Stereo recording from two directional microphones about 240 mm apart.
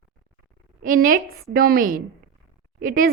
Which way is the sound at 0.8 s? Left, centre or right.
Right.